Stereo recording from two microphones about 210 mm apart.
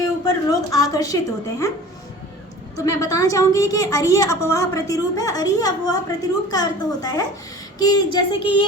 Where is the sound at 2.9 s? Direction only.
15° left (ahead or behind).